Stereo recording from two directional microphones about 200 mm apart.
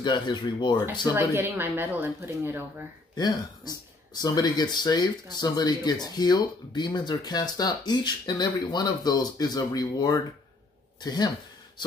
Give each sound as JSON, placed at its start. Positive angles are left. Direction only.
{"t": 0.0, "sound": "speech", "side_deg": 20}
{"t": 1.3, "sound": "speech", "side_deg": -10}
{"t": 3.2, "sound": "speech", "side_deg": 20}